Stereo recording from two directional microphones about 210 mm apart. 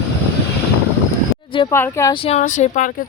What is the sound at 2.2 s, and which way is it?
Speech, 35° left (ahead or behind).